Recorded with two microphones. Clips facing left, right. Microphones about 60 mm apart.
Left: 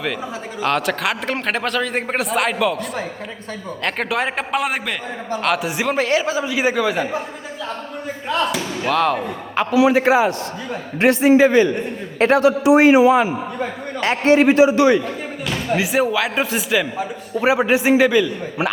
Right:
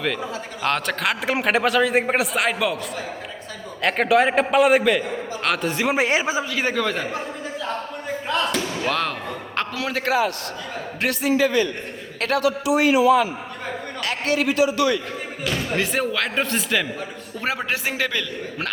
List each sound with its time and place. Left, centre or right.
0.6 s a man's voice: centre
3.8 s a man's voice: centre
6.0 s a man's voice: centre
6.4 s speech: centre
8.3 s a man's voice: centre; by 15.0 s left
15.4 s speech: centre